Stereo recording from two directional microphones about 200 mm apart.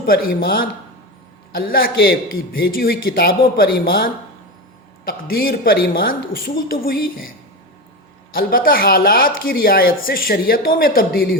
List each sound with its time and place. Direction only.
0.0 s speech: 45° left (ahead or behind)
8.3 s speech: 45° left (ahead or behind)